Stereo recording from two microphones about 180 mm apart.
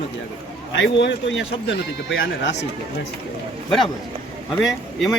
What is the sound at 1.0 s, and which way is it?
Speech, 80° left.